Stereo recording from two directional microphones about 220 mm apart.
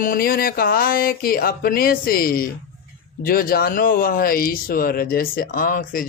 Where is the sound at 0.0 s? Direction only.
40° left (ahead or behind).